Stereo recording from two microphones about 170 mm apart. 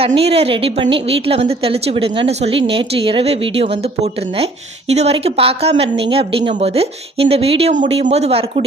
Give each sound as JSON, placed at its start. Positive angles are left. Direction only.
{"t": 0.2, "sound": "a woman's voice", "side_deg": -35}